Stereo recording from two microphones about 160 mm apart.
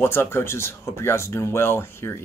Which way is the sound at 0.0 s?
15° left (ahead or behind).